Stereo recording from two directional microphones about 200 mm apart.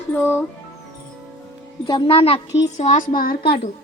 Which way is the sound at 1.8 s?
25° left (ahead or behind).